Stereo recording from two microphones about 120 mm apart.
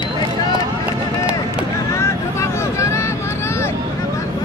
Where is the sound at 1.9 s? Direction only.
20° left (ahead or behind).